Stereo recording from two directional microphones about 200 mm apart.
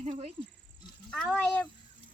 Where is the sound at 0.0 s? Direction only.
30° right (ahead or behind).